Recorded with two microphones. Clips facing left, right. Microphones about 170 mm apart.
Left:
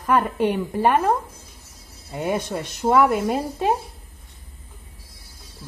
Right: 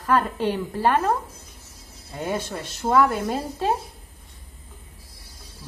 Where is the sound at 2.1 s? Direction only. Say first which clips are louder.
Left 3 dB; 15° left (ahead or behind).